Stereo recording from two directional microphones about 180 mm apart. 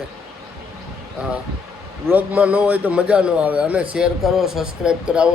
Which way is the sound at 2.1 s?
10° right (ahead or behind).